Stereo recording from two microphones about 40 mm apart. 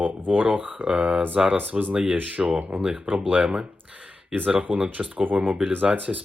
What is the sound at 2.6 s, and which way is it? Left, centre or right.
Speech, right.